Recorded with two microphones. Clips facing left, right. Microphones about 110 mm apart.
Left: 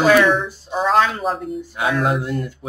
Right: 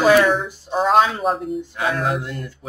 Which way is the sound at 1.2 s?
Centre (ahead or behind).